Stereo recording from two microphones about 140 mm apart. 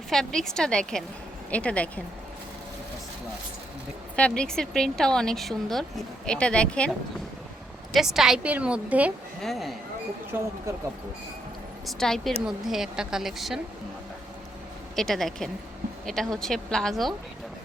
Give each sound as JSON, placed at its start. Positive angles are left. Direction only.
{"t": 0.1, "sound": "a woman's voice", "side_deg": 5}
{"t": 4.1, "sound": "a woman's voice", "side_deg": 5}
{"t": 7.9, "sound": "a woman's voice", "side_deg": -5}
{"t": 9.4, "sound": "a woman's voice", "side_deg": 0}
{"t": 10.3, "sound": "a woman's voice", "side_deg": -15}
{"t": 11.9, "sound": "a woman's voice", "side_deg": 5}
{"t": 14.9, "sound": "a woman's voice", "side_deg": 5}